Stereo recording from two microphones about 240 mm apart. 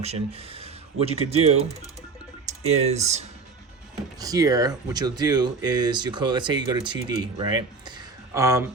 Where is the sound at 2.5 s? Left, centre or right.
Right.